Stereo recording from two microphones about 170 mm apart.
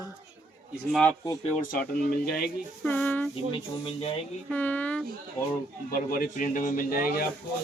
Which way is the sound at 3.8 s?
30° left (ahead or behind).